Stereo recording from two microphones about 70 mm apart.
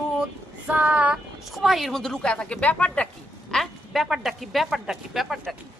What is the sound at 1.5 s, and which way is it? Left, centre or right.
Speech, centre.